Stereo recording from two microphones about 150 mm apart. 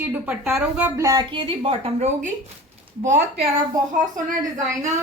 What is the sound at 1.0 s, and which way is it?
Speech, 20° right (ahead or behind).